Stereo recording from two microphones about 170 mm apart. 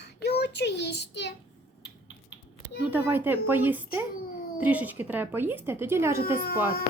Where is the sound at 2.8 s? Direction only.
10° right (ahead or behind).